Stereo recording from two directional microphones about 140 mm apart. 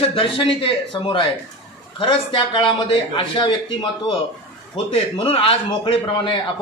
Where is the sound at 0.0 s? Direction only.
40° left (ahead or behind).